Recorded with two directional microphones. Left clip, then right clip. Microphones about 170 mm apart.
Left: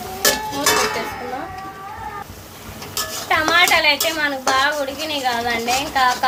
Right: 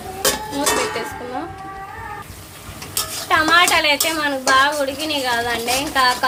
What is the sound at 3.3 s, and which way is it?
A woman's voice, 20° right (ahead or behind).